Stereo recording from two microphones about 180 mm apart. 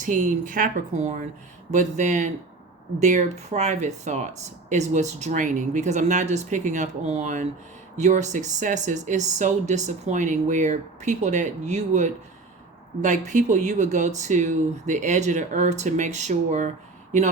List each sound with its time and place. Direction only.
0.0 s speech: 45° right (ahead or behind)